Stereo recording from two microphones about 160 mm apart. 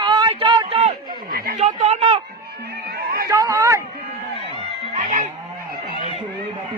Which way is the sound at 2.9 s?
70° right (ahead or behind).